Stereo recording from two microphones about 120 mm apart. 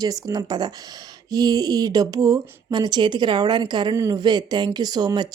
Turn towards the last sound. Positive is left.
turn(degrees=-35)  # may be behind; listen again after turning